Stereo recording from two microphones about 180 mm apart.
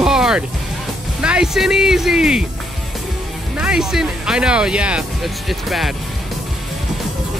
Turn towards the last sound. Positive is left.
turn(degrees=0)  # may be behind; listen again after turning